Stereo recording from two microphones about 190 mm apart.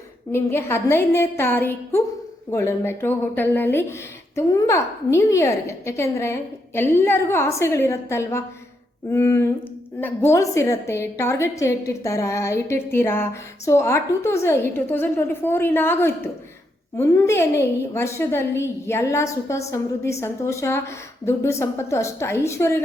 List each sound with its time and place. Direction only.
0.3 s a woman's voice: 10° left (ahead or behind)